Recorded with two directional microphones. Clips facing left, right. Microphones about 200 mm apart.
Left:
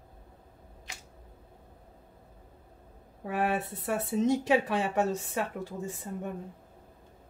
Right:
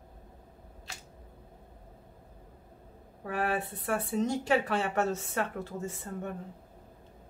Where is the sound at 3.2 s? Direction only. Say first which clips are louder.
Left 2 dB; 20° left (ahead or behind).